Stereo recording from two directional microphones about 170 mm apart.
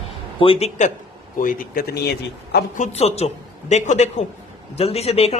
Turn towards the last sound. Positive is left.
turn(degrees=35)  # may be behind; listen again after turning